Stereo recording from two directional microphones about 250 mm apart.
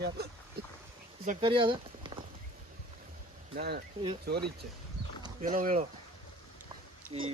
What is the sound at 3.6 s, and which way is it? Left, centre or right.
Speech, right.